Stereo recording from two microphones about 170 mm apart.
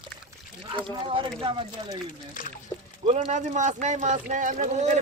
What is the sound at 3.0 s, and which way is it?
Speech, 40° right (ahead or behind).